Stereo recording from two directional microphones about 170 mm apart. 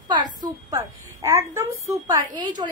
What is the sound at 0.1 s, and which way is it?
A woman's voice, 25° right (ahead or behind).